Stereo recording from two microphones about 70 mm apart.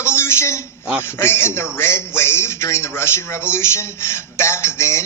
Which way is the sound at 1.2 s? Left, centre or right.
Left.